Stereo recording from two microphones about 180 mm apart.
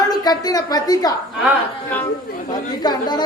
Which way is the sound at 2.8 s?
25° left (ahead or behind).